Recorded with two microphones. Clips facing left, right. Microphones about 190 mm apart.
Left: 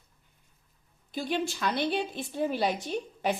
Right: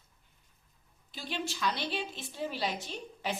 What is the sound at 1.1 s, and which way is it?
A woman's voice, 50° left (ahead or behind).